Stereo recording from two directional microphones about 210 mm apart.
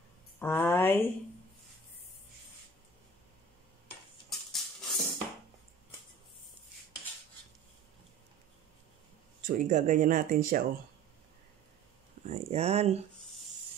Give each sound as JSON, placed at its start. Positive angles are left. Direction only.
{"t": 0.4, "sound": "speech", "side_deg": 10}
{"t": 4.3, "sound": "music", "side_deg": 0}
{"t": 9.4, "sound": "speech", "side_deg": -40}
{"t": 12.3, "sound": "speech", "side_deg": -30}